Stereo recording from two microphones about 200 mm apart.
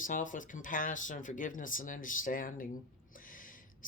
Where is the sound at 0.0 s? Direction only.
40° left (ahead or behind).